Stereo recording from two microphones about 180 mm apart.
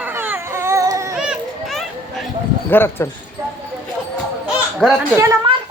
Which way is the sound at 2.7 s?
10° left (ahead or behind).